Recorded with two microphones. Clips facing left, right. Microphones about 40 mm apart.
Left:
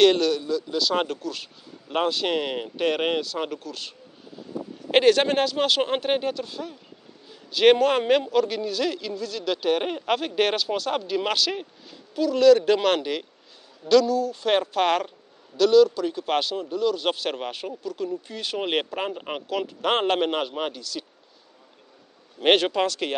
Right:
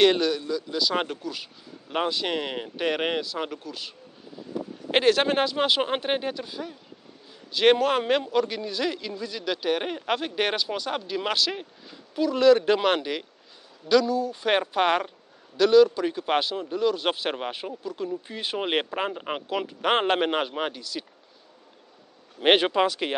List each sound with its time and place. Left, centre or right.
0.0 s a man's voice: centre
4.9 s a man's voice: centre
12.2 s a man's voice: centre
22.4 s speech: centre